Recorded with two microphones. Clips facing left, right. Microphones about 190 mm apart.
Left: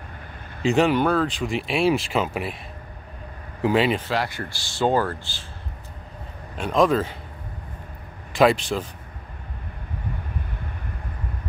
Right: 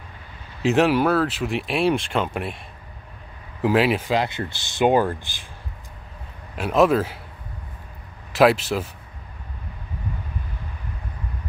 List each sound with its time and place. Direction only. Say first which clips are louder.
0.6 s speech: right 1 dB; centre (ahead or behind)
3.6 s speech: right 1 dB; 5° right (ahead or behind)
4.1 s speech: right 3 dB; 20° right (ahead or behind)
6.5 s speech: right 2 dB; 5° right (ahead or behind)
8.3 s speech: right 1 dB; 5° right (ahead or behind)